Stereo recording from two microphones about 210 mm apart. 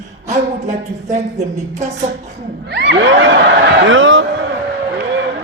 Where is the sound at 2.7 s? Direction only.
55° right (ahead or behind).